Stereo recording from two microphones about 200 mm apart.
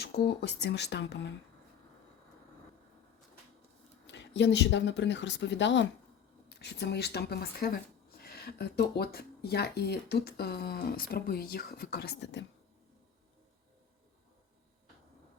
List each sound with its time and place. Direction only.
0.0 s speech: 55° left (ahead or behind)
4.0 s speech: 60° left (ahead or behind)